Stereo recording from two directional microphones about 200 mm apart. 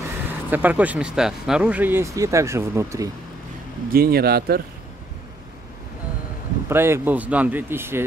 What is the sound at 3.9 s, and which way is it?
Speech, 50° right (ahead or behind).